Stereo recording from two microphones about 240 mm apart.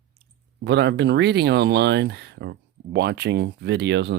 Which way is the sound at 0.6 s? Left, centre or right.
Right.